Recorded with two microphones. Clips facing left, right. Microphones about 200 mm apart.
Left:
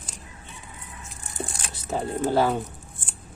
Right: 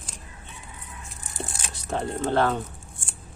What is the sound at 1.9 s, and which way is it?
Speech, 5° left (ahead or behind).